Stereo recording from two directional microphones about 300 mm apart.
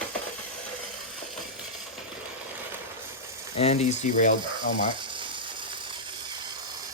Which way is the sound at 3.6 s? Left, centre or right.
Left.